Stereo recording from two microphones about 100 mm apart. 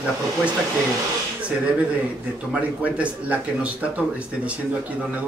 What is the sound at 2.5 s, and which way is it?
Speech, 15° right (ahead or behind).